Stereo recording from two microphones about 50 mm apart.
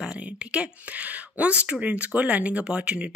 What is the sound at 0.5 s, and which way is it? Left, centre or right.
Speech, right.